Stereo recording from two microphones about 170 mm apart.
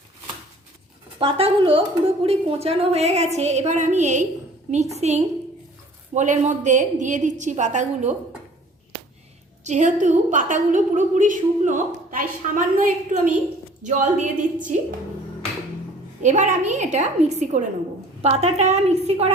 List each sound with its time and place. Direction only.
1.2 s a woman's voice: 35° right (ahead or behind)
9.6 s a woman's voice: 45° right (ahead or behind)
16.2 s a woman's voice: 45° right (ahead or behind)